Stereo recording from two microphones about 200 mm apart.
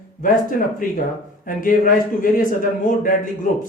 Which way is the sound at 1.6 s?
40° left (ahead or behind).